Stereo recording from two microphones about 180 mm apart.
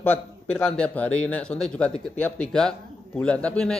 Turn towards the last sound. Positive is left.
turn(degrees=5)  # may be behind; listen again after turning